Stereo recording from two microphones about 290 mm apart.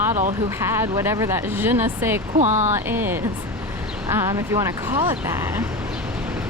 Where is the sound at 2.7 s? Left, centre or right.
Centre.